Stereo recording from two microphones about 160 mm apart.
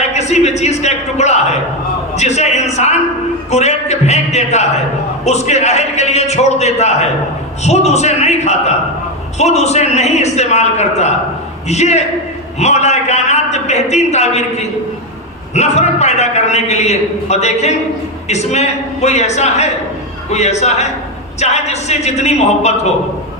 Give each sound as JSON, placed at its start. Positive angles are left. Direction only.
{"t": 0.1, "sound": "a man's voice", "side_deg": 45}
{"t": 2.1, "sound": "a sound", "side_deg": 45}
{"t": 7.6, "sound": "a man's voice", "side_deg": 45}